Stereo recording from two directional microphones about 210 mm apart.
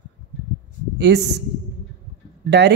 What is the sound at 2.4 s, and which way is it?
Speech, 50° right (ahead or behind).